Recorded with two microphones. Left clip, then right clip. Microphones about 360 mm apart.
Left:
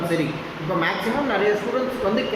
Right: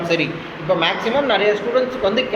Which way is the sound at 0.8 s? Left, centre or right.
Centre.